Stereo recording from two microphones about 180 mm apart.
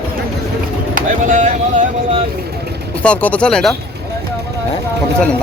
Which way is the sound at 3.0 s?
5° left (ahead or behind).